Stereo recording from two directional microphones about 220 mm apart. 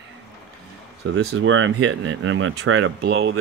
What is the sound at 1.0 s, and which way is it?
Speech, 70° right (ahead or behind).